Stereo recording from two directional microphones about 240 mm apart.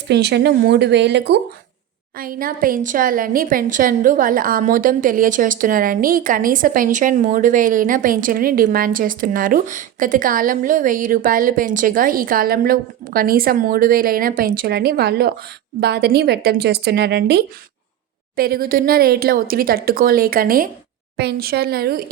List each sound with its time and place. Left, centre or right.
0.1 s a woman's voice: right